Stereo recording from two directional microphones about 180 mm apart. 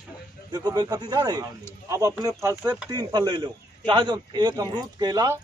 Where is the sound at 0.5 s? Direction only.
20° right (ahead or behind).